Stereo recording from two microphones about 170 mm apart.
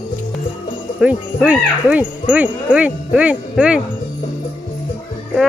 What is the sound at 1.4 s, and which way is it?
Speech, 10° right (ahead or behind).